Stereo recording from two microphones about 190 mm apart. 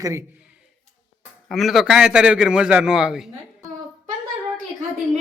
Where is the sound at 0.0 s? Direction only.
15° right (ahead or behind).